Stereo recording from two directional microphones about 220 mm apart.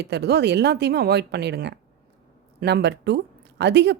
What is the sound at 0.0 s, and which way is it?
Speech, 50° right (ahead or behind).